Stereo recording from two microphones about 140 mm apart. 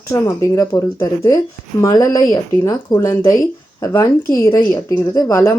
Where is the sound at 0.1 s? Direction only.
20° left (ahead or behind).